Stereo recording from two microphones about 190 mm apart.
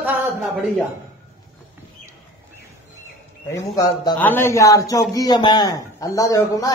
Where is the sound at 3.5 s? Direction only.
20° left (ahead or behind).